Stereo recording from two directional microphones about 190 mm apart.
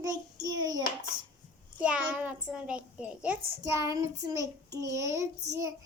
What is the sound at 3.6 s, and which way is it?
Child singing, 15° right (ahead or behind).